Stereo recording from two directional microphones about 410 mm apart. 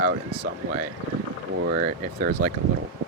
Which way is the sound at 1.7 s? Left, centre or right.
Centre.